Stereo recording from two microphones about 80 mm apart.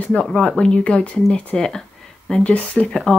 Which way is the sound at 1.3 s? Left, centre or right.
Centre.